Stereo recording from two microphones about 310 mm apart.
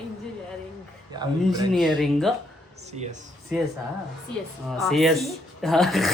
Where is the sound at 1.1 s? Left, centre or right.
Centre.